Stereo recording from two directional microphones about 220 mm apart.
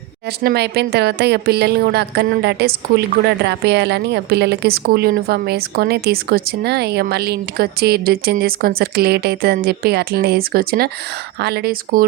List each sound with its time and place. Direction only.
0.4 s a woman's voice: 45° right (ahead or behind)